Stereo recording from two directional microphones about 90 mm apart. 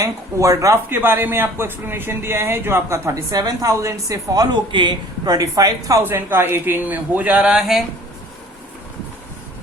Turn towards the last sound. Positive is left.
turn(degrees=-5)  # may be behind; listen again after turning